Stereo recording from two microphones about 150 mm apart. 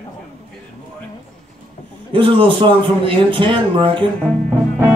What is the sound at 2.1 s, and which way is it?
A man's voice, 35° right (ahead or behind).